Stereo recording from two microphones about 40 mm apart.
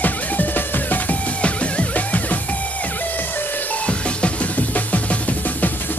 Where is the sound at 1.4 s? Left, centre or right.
Left.